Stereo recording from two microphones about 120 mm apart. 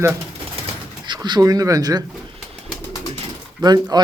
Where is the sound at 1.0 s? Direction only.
40° right (ahead or behind).